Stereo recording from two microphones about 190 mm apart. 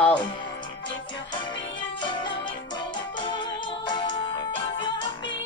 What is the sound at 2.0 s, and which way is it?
Music, 25° left (ahead or behind).